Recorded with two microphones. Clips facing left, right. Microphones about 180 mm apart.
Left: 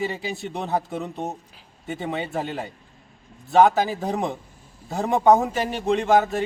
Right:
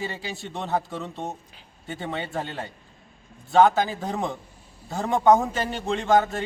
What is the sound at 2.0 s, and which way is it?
Speech, 5° left (ahead or behind).